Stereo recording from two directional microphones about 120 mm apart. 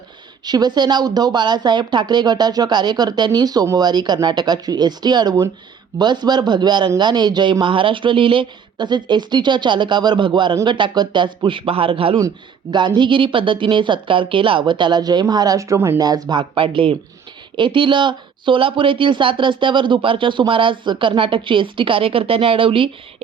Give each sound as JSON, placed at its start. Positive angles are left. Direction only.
{"t": 0.4, "sound": "speech", "side_deg": -35}